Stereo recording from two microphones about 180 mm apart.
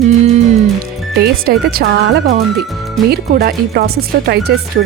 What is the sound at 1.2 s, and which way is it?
A woman's voice, 60° right (ahead or behind).